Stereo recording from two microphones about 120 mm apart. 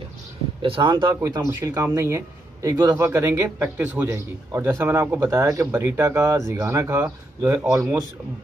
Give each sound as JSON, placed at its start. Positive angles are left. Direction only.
{"t": 0.6, "sound": "speech", "side_deg": -45}
{"t": 1.2, "sound": "speech", "side_deg": -25}